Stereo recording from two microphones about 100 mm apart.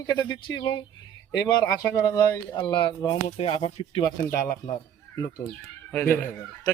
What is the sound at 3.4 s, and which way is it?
Speech, 80° left.